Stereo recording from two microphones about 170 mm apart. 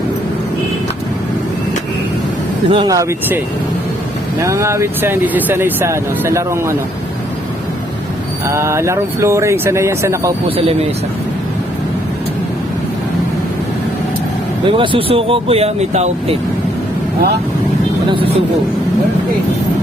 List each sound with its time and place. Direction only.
2.6 s speech: 25° right (ahead or behind)
8.4 s speech: 15° right (ahead or behind)
14.6 s speech: 30° right (ahead or behind)
18.1 s speech: 30° right (ahead or behind)